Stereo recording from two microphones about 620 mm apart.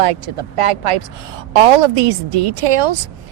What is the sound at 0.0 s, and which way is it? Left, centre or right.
A woman's voice, right.